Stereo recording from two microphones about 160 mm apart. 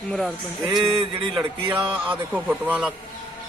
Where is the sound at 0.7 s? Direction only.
30° right (ahead or behind).